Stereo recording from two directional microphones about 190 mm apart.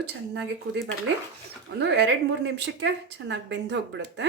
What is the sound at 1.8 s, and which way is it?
A woman's voice, 65° right (ahead or behind).